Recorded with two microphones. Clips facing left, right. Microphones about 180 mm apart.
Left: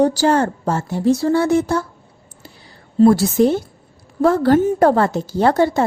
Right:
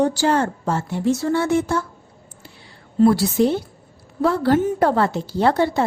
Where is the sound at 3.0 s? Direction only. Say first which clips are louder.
Left 3 dB; 45° left (ahead or behind).